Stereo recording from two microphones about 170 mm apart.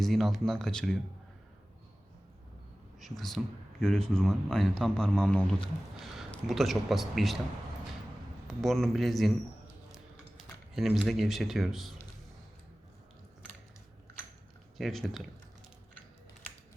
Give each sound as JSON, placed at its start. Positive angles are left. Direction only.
{"t": 0.0, "sound": "speech", "side_deg": 0}
{"t": 3.0, "sound": "speech", "side_deg": 0}
{"t": 8.4, "sound": "speech", "side_deg": 0}
{"t": 9.9, "sound": "a sound", "side_deg": 0}
{"t": 14.8, "sound": "speech", "side_deg": 0}